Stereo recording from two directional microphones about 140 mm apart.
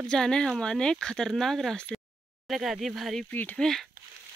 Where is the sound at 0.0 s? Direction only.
5° left (ahead or behind).